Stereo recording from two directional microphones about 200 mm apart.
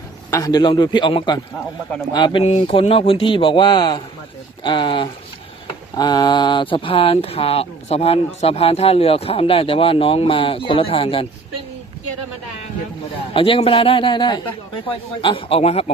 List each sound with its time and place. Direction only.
0.3 s speech: 15° left (ahead or behind)
13.3 s speech: 25° left (ahead or behind)